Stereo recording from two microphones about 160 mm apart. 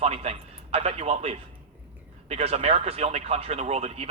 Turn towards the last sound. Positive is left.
turn(degrees=-40)  # may be behind; listen again after turning